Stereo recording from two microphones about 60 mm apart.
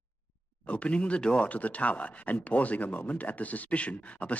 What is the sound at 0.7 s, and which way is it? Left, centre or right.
Speech, left.